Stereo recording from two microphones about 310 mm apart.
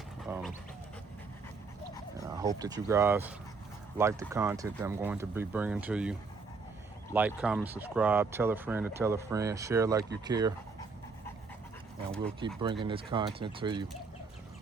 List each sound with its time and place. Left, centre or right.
0.3 s dog: centre
2.2 s speech: centre
12.4 s speech: centre